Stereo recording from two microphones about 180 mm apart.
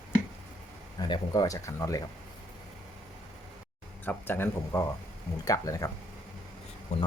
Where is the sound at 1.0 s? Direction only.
25° left (ahead or behind).